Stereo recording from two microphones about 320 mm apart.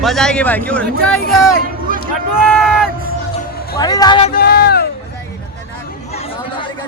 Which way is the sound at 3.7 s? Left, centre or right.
Centre.